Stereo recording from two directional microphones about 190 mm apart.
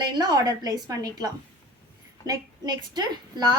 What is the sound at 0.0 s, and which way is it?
A woman's voice, 20° right (ahead or behind).